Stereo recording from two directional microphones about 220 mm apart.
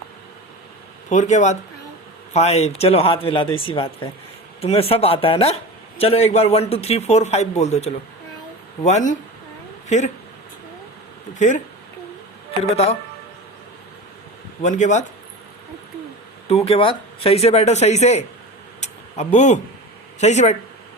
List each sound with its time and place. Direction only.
1.1 s a man's voice: 35° left (ahead or behind)
11.3 s speech: 35° left (ahead or behind)
12.7 s a man's voice: 25° left (ahead or behind)
14.6 s speech: 35° left (ahead or behind)
16.5 s a man's voice: 25° left (ahead or behind)
18.8 s a sound: 30° left (ahead or behind)
20.1 s speech: 30° left (ahead or behind)